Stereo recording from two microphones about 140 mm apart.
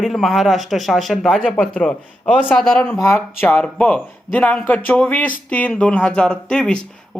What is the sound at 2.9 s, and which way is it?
Speech, 20° left (ahead or behind).